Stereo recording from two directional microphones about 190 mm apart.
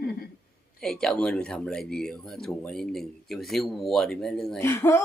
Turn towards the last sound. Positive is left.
turn(degrees=15)  # may be behind; listen again after turning